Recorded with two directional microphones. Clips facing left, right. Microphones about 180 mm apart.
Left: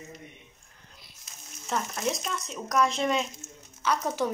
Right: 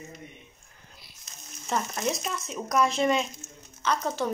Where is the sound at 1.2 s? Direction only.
Centre (ahead or behind).